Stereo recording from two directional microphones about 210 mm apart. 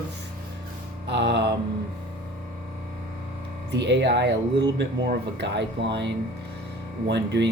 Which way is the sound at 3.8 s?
55° right (ahead or behind).